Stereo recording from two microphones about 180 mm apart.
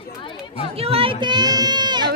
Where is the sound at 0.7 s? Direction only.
35° right (ahead or behind).